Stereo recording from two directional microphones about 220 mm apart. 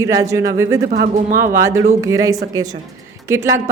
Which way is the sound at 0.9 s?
40° right (ahead or behind).